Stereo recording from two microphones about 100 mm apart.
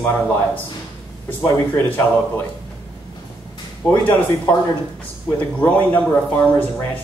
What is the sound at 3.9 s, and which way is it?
Speech, 15° left (ahead or behind).